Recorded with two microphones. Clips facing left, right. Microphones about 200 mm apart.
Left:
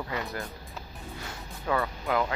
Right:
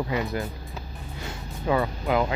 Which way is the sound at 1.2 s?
20° right (ahead or behind).